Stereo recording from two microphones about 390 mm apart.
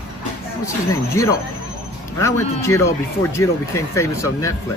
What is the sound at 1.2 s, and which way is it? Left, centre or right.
Speech, centre.